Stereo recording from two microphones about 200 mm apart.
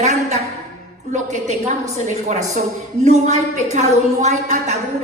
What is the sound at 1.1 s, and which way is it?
A woman's voice, 35° right (ahead or behind).